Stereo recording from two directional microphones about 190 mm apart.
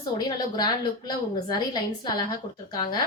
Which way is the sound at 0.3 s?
20° left (ahead or behind).